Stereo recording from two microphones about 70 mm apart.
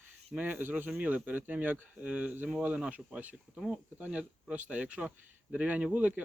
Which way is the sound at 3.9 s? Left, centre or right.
Centre.